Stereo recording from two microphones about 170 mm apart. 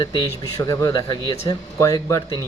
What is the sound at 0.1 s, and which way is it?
Speech, 20° left (ahead or behind).